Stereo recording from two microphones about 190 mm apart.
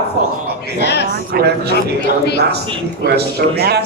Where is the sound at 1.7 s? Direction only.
60° left (ahead or behind).